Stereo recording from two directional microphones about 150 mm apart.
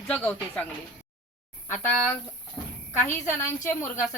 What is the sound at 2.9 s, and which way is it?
Speech, 15° left (ahead or behind).